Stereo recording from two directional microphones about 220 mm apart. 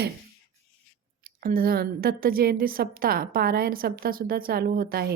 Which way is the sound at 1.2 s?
40° right (ahead or behind).